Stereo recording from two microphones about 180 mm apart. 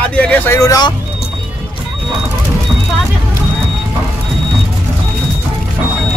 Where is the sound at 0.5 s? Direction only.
20° left (ahead or behind).